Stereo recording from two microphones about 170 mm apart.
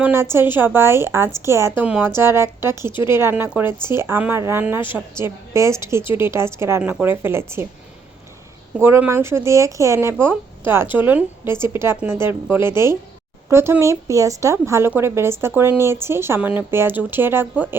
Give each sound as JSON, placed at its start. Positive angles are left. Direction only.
{"t": 0.0, "sound": "a woman's voice", "side_deg": -15}
{"t": 8.8, "sound": "a woman's voice", "side_deg": -15}